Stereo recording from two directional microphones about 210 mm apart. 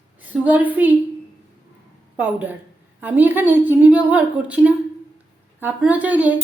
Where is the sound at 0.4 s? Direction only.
10° right (ahead or behind).